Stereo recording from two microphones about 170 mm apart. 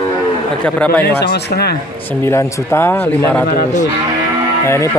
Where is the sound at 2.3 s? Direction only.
15° left (ahead or behind).